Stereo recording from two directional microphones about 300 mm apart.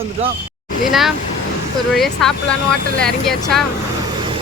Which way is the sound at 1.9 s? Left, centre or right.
Centre.